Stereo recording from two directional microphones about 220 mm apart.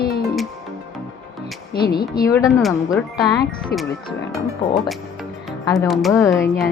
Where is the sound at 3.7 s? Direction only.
45° left (ahead or behind).